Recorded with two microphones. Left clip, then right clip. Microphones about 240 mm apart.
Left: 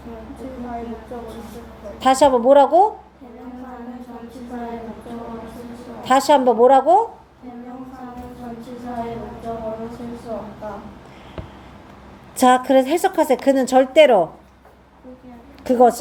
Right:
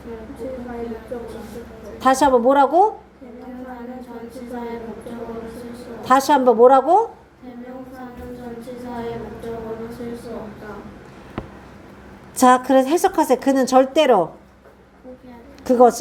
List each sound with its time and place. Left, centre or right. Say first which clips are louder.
2.0 s a woman's voice: left 1 dB; centre
6.0 s a woman's voice: left 1 dB; centre
11.4 s a sound: right 4 dB; right
12.4 s a woman's voice: even; centre
15.6 s a woman's voice: right 1 dB; centre